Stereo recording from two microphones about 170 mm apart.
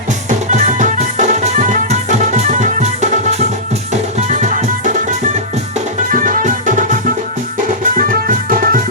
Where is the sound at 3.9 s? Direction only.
45° right (ahead or behind).